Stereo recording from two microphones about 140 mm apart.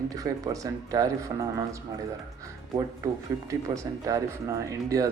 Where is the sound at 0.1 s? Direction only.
25° right (ahead or behind).